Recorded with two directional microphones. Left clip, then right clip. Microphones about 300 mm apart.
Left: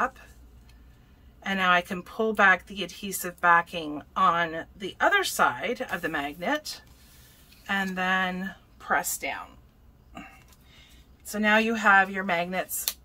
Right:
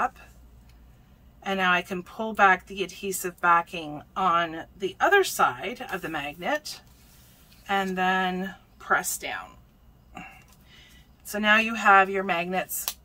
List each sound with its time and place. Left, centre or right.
1.4 s speech: centre
11.3 s speech: centre